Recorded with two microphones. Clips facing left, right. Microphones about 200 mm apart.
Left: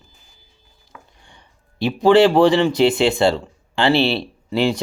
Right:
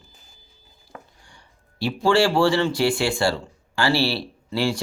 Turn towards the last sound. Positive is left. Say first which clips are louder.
# left 5 dB
turn(degrees=20)  # may be behind; listen again after turning